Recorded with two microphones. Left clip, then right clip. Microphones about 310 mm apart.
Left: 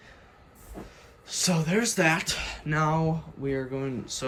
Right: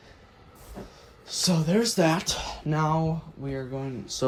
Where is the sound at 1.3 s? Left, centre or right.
Centre.